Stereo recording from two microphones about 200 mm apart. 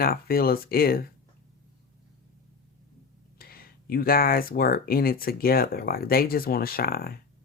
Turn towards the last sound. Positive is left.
turn(degrees=50)  # may be behind; listen again after turning